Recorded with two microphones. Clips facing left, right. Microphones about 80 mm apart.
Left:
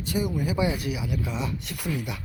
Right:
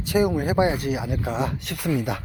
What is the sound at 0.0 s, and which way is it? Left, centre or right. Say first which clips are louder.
Speech: right 6 dB; right.